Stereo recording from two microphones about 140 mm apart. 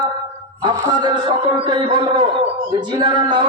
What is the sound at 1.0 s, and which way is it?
Speech, 30° right (ahead or behind).